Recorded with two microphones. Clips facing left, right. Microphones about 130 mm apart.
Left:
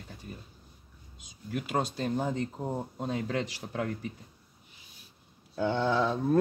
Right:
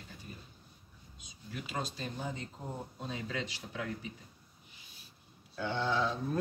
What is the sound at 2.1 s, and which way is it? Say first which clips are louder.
Speech: left 10 dB; 75° left (ahead or behind).